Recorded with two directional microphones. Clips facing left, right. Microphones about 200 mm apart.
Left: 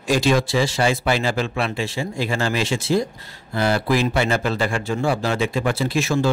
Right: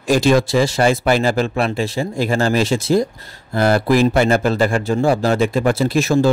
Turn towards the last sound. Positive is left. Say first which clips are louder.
# right 5 dB
turn(degrees=-40)  # may be behind; listen again after turning